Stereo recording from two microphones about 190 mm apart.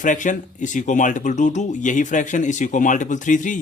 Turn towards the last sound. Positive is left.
turn(degrees=40)  # may be behind; listen again after turning